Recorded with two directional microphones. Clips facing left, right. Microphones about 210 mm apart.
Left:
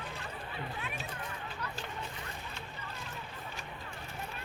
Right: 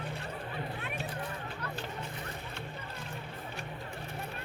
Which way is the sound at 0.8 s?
60° right (ahead or behind).